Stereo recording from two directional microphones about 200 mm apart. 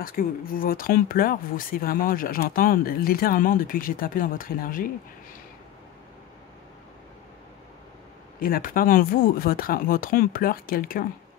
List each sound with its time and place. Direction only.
0.0 s speech: 45° left (ahead or behind)
8.4 s speech: 45° left (ahead or behind)